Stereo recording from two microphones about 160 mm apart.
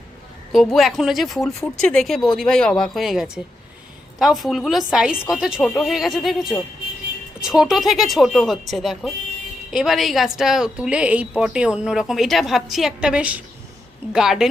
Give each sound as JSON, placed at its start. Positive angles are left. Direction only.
{"t": 0.5, "sound": "a woman's voice", "side_deg": 0}